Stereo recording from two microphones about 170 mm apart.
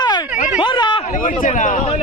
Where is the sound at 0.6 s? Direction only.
30° left (ahead or behind).